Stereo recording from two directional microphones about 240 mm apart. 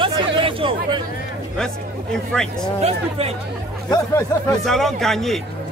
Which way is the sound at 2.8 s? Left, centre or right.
Right.